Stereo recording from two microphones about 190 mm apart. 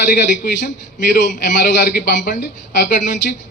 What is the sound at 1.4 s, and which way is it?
A man's voice, 65° left (ahead or behind).